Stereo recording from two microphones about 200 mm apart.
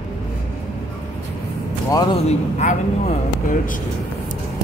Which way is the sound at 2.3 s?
35° left (ahead or behind).